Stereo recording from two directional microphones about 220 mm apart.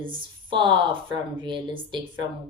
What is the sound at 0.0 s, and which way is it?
Speech, 20° right (ahead or behind).